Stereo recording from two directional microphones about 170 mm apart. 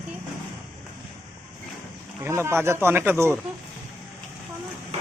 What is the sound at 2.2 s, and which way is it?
Speech, 15° right (ahead or behind).